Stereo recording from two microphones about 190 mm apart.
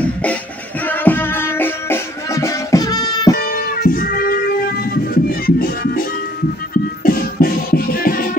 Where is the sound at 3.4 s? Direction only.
50° left (ahead or behind).